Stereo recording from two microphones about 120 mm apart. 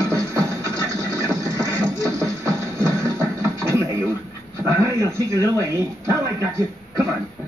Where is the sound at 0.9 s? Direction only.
30° left (ahead or behind).